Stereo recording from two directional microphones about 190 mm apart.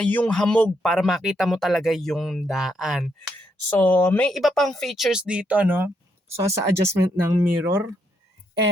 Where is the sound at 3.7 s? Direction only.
10° left (ahead or behind); by 7.9 s 10° right (ahead or behind).